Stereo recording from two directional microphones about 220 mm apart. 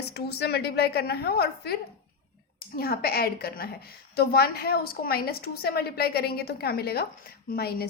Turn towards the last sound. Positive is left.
turn(degrees=45)  # may be behind; listen again after turning